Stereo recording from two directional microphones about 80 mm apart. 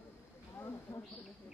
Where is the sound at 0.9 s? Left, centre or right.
Left.